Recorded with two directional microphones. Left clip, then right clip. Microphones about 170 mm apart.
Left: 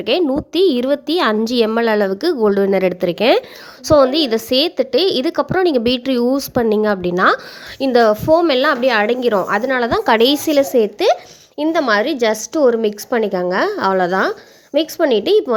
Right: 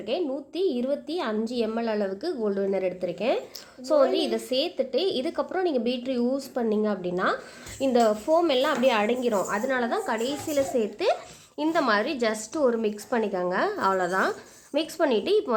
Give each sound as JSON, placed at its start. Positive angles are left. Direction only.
{"t": 0.0, "sound": "a woman's voice", "side_deg": 45}